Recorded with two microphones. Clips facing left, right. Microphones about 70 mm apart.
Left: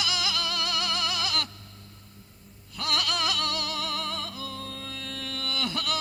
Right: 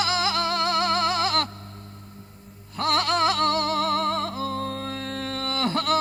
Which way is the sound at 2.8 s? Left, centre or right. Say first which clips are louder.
Right 7 dB; right.